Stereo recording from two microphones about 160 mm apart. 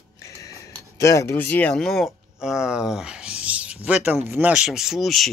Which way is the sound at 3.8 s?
10° right (ahead or behind).